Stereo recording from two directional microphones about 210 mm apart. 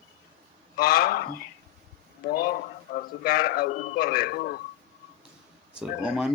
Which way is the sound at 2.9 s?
45° left (ahead or behind).